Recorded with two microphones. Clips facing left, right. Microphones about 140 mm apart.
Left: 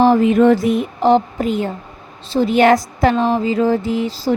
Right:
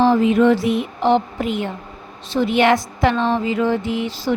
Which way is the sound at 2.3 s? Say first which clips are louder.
Left 3 dB; 40° left (ahead or behind).